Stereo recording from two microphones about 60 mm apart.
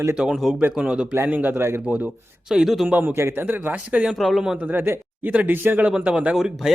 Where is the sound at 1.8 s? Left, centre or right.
Right.